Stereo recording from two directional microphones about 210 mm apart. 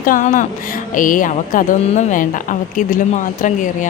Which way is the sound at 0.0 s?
40° left (ahead or behind).